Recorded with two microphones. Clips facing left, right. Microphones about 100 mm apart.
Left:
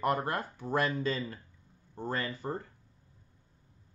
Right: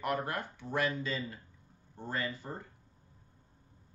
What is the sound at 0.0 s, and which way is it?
Speech, 35° left (ahead or behind).